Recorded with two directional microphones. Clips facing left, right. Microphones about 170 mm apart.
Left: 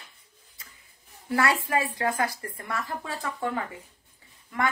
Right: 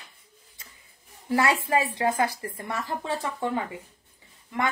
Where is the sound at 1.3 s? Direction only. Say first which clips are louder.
Right 2 dB; 20° right (ahead or behind).